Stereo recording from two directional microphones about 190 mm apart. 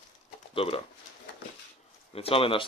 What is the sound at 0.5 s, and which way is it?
Speech, 30° left (ahead or behind).